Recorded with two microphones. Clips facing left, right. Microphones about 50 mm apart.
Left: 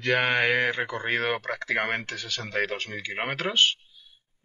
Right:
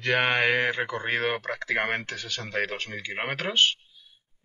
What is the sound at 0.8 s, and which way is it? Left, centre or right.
Speech, centre.